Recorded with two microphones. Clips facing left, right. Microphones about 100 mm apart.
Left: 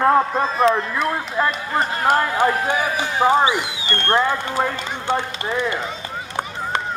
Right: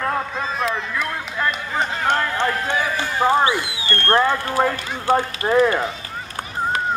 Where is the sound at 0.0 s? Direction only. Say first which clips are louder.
Left 7 dB; 35° left (ahead or behind).